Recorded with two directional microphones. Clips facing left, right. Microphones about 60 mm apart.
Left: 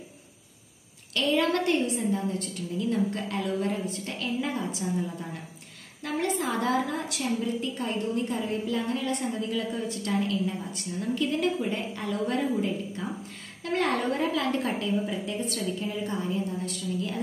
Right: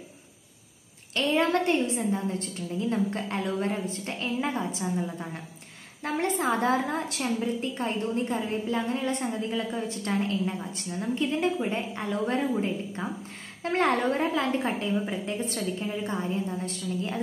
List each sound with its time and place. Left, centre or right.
1.1 s a woman's voice: right